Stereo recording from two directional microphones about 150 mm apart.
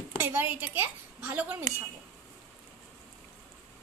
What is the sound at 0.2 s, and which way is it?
A woman's voice, 10° right (ahead or behind).